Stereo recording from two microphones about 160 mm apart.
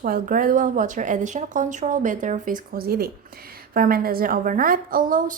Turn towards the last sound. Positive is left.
turn(degrees=-55)  # may be behind; listen again after turning